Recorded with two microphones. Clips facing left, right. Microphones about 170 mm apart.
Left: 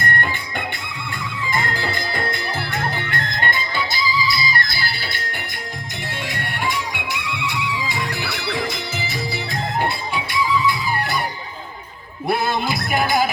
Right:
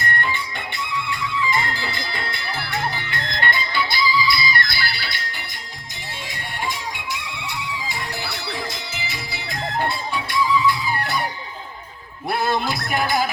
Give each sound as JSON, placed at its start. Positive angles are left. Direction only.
{"t": 0.0, "sound": "music", "side_deg": 50}
{"t": 1.5, "sound": "music", "side_deg": 50}
{"t": 6.2, "sound": "music", "side_deg": 65}
{"t": 9.0, "sound": "music", "side_deg": 40}
{"t": 10.7, "sound": "music", "side_deg": 5}
{"t": 12.3, "sound": "music", "side_deg": 5}